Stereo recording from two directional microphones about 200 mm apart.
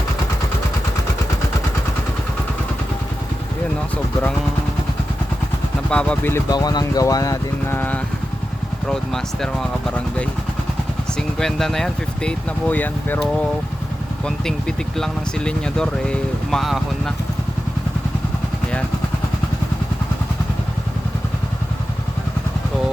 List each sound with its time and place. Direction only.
3.9 s vehicle: 5° left (ahead or behind)
5.9 s speech: 5° left (ahead or behind)